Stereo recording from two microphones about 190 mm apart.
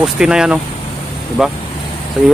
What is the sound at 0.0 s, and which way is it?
Speech, 5° right (ahead or behind).